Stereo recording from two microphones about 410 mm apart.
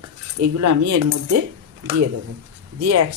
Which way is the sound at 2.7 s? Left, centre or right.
Right.